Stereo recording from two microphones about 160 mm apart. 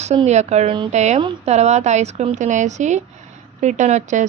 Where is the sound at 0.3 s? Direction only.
45° right (ahead or behind).